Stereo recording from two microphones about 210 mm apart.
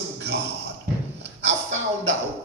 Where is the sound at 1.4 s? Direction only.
60° right (ahead or behind).